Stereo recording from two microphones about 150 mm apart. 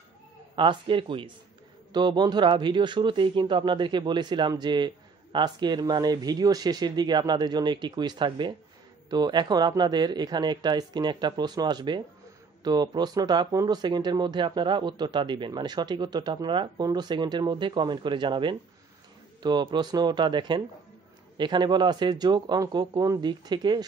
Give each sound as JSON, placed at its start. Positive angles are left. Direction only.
{"t": 0.6, "sound": "speech", "side_deg": -35}